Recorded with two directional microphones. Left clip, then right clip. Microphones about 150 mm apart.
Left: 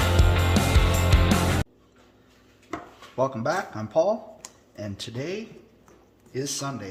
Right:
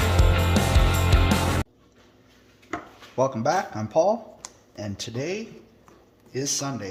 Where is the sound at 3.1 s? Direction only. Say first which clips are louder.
Right 3 dB; 40° right (ahead or behind).